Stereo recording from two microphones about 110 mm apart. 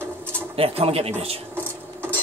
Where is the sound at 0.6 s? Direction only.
60° right (ahead or behind).